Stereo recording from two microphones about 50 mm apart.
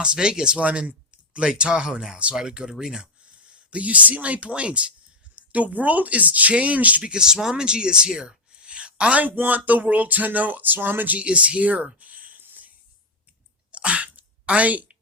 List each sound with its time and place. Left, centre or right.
0.0 s speech: centre
0.6 s speech: right
3.7 s speech: right
7.0 s a woman's voice: centre
9.2 s speech: right
11.2 s speech: right
11.9 s a sound: right
13.7 s a sound: right